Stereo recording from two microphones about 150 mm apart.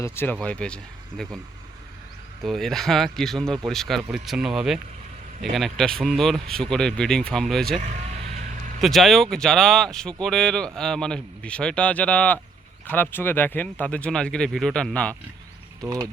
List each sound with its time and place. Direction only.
0.0 s speech: 10° left (ahead or behind)
2.4 s speech: centre (ahead or behind)
7.8 s vehicle: 50° right (ahead or behind)
8.8 s speech: centre (ahead or behind)
15.8 s speech: 20° right (ahead or behind)